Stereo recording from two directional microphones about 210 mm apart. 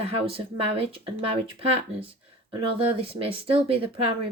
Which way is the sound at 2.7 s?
25° right (ahead or behind).